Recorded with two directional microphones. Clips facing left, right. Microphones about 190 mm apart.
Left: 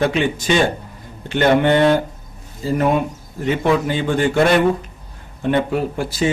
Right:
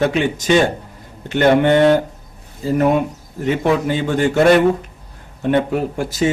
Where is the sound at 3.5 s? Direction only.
45° right (ahead or behind).